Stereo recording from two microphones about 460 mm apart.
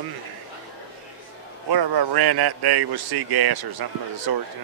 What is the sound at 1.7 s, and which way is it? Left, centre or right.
A man's voice, right.